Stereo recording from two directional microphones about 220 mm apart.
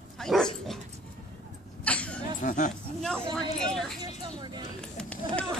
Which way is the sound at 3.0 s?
5° left (ahead or behind).